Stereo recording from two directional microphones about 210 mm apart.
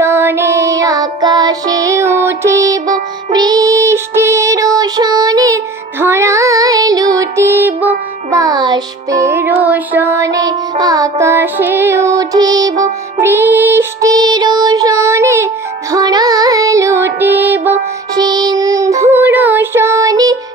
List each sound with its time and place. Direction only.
0.0 s child singing: 10° right (ahead or behind)
8.3 s music: 15° right (ahead or behind)